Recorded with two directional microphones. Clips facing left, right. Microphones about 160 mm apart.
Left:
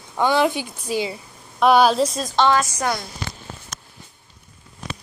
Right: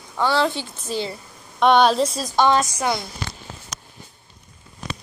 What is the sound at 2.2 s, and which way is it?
Speech, 15° right (ahead or behind).